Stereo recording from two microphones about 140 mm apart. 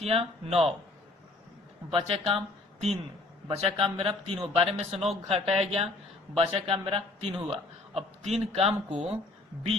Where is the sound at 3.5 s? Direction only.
40° right (ahead or behind).